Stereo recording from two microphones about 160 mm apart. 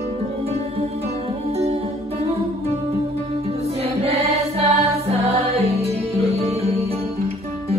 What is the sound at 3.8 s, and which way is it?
Music, 40° right (ahead or behind).